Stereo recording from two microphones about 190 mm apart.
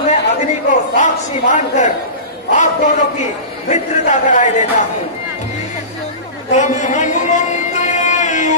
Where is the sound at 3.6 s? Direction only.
40° left (ahead or behind).